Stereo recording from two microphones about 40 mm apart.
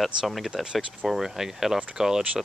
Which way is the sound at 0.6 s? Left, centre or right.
Right.